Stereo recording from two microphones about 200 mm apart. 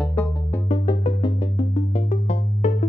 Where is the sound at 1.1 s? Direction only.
20° left (ahead or behind).